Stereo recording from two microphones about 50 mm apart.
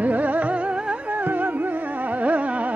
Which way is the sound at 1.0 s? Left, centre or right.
Right.